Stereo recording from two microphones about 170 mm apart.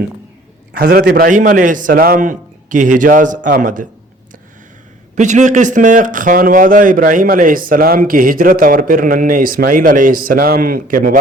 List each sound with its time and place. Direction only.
0.7 s a man's voice: 60° right (ahead or behind)
5.1 s speech: 45° right (ahead or behind)